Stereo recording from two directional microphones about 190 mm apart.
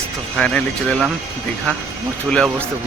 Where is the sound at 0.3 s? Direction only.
5° left (ahead or behind).